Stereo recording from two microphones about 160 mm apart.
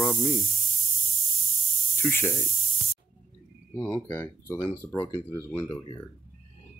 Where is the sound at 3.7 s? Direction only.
10° left (ahead or behind).